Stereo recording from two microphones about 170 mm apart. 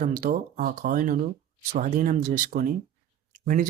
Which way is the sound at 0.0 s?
50° right (ahead or behind).